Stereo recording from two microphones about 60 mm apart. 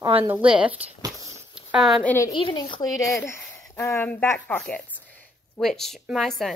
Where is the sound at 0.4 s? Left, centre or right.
Right.